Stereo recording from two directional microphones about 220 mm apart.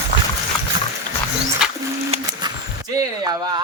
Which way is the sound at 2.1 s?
20° right (ahead or behind).